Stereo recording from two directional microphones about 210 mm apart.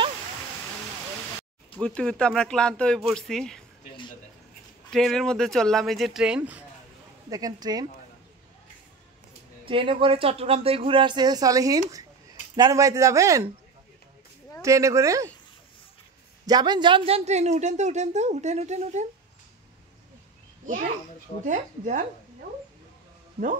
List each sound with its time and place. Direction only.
1.8 s speech: 5° left (ahead or behind)
4.9 s speech: centre (ahead or behind)
7.2 s speech: 15° right (ahead or behind)
9.7 s speech: 25° right (ahead or behind)
14.6 s speech: 15° right (ahead or behind)
16.4 s speech: 20° right (ahead or behind)
21.5 s speech: 35° right (ahead or behind)